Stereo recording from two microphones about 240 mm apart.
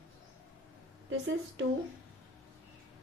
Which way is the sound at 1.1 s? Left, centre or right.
Right.